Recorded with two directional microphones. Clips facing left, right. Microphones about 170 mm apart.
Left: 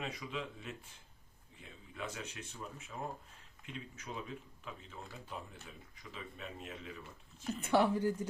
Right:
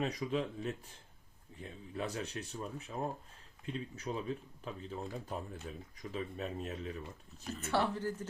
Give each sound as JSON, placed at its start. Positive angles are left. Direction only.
{"t": 0.0, "sound": "speech", "side_deg": -40}
{"t": 7.6, "sound": "speech", "side_deg": 15}